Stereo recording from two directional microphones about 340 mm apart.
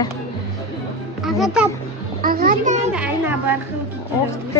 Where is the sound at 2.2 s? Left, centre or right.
Right.